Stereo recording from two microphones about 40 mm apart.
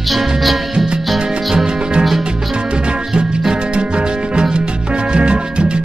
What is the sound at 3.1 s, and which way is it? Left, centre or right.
Music, centre.